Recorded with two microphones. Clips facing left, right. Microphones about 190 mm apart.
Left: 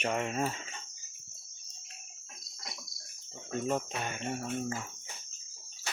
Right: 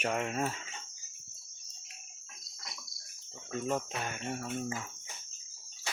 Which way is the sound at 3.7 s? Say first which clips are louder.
Even; centre (ahead or behind).